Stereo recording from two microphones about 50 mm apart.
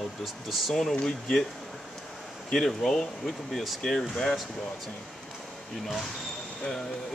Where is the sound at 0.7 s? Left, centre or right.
Centre.